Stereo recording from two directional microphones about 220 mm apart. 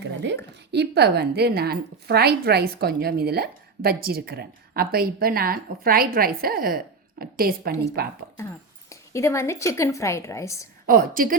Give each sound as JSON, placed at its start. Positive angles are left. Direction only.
{"t": 0.0, "sound": "a sound", "side_deg": -55}
{"t": 0.7, "sound": "a woman's voice", "side_deg": -50}
{"t": 8.9, "sound": "a woman's voice", "side_deg": 15}
{"t": 10.8, "sound": "a woman's voice", "side_deg": -40}